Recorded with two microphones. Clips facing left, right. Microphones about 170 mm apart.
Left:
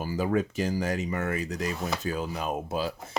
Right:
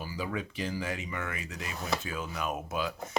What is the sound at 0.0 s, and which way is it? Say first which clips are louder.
Speech: left 9 dB; 45° left (ahead or behind).